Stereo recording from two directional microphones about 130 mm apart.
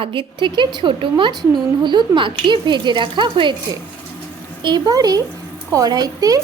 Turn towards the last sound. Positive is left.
turn(degrees=-25)  # may be behind; listen again after turning